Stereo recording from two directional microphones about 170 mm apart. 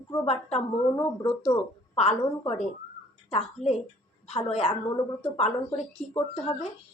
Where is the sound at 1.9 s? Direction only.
35° left (ahead or behind).